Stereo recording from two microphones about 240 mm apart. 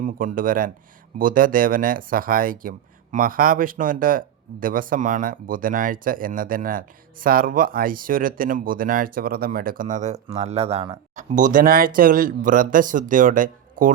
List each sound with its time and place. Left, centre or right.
0.0 s speech: right